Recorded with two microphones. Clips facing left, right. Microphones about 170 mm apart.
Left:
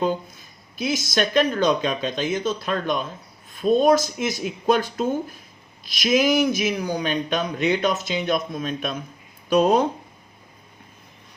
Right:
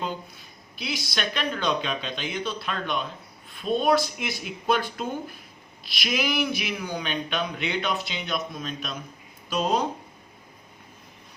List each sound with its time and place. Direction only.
0.8 s speech: 45° left (ahead or behind)